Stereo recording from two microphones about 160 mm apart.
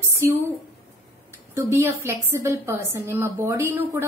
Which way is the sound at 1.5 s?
15° right (ahead or behind).